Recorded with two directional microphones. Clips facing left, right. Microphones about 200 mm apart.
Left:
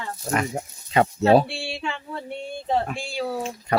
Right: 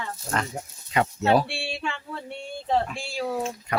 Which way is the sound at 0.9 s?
30° left (ahead or behind).